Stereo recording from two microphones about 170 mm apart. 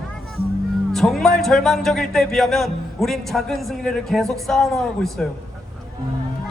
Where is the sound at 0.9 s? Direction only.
Centre (ahead or behind).